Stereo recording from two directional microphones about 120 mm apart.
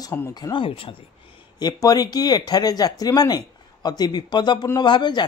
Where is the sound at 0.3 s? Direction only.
35° left (ahead or behind).